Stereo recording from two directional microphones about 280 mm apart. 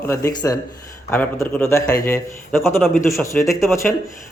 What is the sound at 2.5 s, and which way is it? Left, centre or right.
Speech, centre.